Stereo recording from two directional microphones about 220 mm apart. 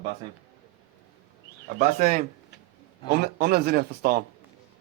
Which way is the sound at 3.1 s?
45° right (ahead or behind).